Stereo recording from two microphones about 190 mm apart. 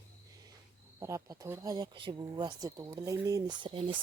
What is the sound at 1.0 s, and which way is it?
Speech, 15° right (ahead or behind).